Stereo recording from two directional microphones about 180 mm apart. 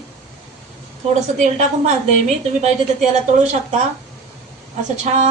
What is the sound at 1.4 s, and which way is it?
Speech, 40° right (ahead or behind).